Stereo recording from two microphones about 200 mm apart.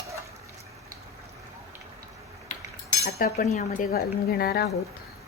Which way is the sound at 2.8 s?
40° left (ahead or behind).